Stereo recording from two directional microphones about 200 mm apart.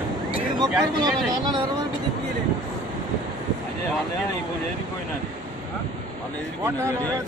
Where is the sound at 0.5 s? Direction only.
20° right (ahead or behind).